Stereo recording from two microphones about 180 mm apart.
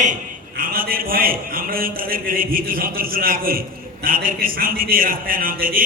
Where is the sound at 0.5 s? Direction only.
55° right (ahead or behind).